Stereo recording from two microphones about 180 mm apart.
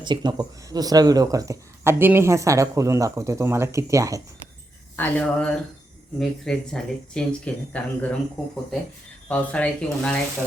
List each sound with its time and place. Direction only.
0.0 s speech: 25° right (ahead or behind)
4.9 s speech: 10° left (ahead or behind)